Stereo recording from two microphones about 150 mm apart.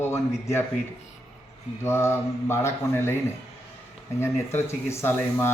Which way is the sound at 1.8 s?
15° left (ahead or behind).